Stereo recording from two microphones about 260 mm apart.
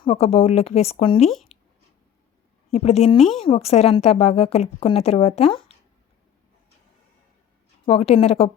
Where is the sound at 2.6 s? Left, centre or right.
Left.